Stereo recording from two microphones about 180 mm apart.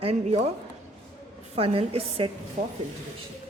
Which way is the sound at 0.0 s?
35° right (ahead or behind).